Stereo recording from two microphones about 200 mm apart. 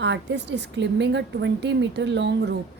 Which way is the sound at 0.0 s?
60° right (ahead or behind).